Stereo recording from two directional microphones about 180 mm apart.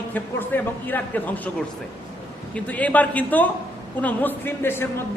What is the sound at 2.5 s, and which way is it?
A man's voice, 10° left (ahead or behind).